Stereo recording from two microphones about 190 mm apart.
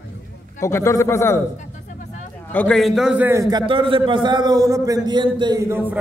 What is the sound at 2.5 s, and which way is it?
A man's voice, 5° left (ahead or behind).